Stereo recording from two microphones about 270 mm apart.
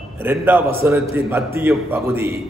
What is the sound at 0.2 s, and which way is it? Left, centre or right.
A man's voice, centre.